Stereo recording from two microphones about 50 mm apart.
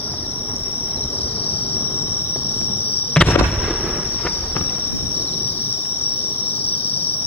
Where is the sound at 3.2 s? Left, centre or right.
Centre.